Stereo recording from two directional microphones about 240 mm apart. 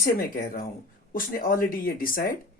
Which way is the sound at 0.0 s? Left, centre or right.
Left.